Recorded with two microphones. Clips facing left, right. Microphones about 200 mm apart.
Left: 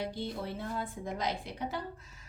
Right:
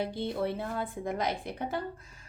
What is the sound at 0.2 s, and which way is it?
A woman's voice, 60° right (ahead or behind).